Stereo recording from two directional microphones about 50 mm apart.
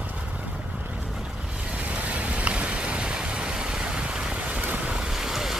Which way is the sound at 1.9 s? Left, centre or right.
Right.